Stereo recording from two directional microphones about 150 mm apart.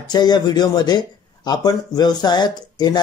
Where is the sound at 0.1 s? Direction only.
25° left (ahead or behind).